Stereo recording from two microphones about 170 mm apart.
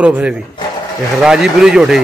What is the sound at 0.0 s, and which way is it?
Speech, 5° right (ahead or behind).